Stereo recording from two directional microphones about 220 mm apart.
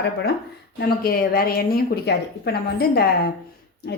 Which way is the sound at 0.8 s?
40° left (ahead or behind).